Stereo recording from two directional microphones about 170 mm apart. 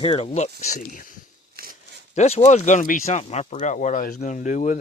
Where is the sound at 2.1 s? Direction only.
40° left (ahead or behind).